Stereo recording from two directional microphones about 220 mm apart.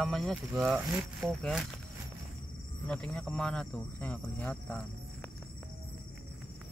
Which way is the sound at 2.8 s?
5° left (ahead or behind).